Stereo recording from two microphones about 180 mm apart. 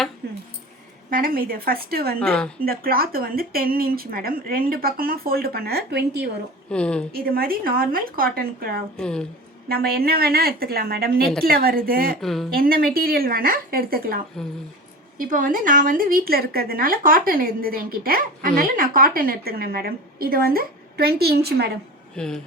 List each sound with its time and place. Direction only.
0.2 s a sound: 60° right (ahead or behind)
1.1 s speech: 55° right (ahead or behind)
2.1 s speech: 5° left (ahead or behind)
2.6 s speech: 55° right (ahead or behind)
6.7 s speech: 5° left (ahead or behind)
7.1 s speech: 55° right (ahead or behind)
9.0 s speech: 5° left (ahead or behind)
9.6 s speech: 55° right (ahead or behind)
12.2 s speech: centre (ahead or behind)
12.5 s speech: 55° right (ahead or behind)
15.2 s a woman's voice: 50° right (ahead or behind)
22.1 s speech: 5° left (ahead or behind)